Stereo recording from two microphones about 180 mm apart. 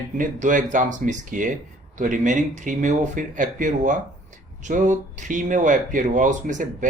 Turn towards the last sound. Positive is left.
turn(degrees=-45)  # may be behind; listen again after turning